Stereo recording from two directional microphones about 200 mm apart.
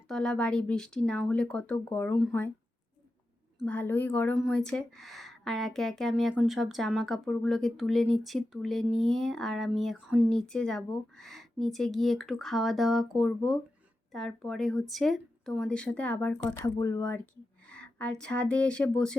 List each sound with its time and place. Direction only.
0.1 s speech: 5° left (ahead or behind)
3.6 s speech: 5° left (ahead or behind)
16.5 s speech: 20° left (ahead or behind)
17.7 s speech: 5° left (ahead or behind)